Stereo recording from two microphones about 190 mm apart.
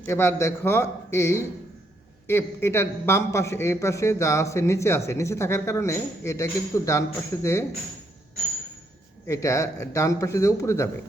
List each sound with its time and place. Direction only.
0.0 s speech: 15° left (ahead or behind)
9.2 s speech: 15° left (ahead or behind)